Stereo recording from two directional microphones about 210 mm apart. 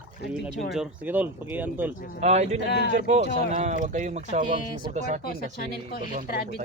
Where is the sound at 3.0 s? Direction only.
35° right (ahead or behind).